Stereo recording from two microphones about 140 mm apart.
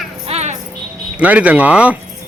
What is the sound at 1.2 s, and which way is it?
Speech, 10° right (ahead or behind).